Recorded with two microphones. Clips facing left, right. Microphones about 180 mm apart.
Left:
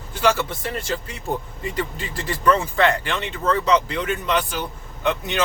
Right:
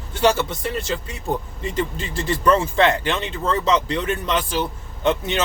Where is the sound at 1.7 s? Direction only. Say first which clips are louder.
Right 4 dB; 25° right (ahead or behind).